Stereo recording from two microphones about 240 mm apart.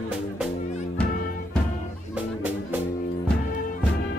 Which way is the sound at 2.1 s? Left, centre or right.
Centre.